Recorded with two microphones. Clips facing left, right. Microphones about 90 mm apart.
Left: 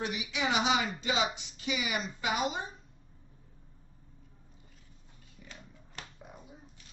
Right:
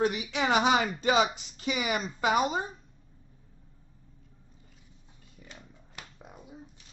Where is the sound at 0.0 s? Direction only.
40° right (ahead or behind).